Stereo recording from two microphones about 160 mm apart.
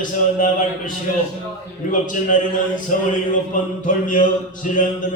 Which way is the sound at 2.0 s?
55° left (ahead or behind).